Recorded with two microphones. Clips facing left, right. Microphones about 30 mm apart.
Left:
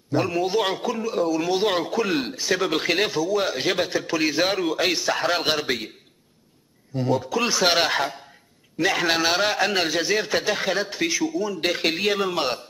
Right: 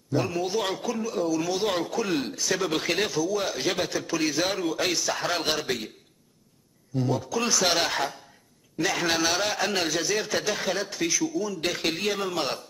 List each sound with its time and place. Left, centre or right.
0.1 s a man's voice: centre
7.0 s a man's voice: left